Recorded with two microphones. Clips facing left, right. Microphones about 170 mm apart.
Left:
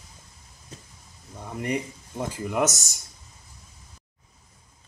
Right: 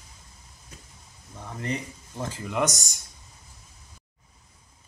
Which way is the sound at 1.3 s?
15° left (ahead or behind).